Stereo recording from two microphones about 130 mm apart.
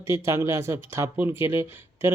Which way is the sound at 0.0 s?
20° right (ahead or behind).